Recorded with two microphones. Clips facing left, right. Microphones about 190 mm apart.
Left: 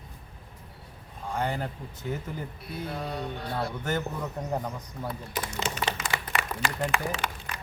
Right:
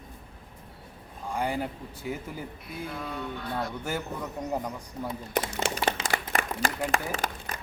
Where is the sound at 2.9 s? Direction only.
35° left (ahead or behind).